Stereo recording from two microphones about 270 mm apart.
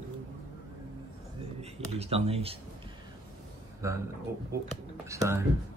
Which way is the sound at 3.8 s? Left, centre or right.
Centre.